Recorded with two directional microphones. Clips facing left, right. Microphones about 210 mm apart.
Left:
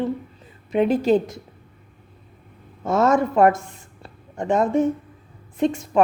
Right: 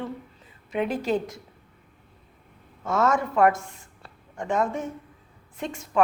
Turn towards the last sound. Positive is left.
turn(degrees=35)  # may be behind; listen again after turning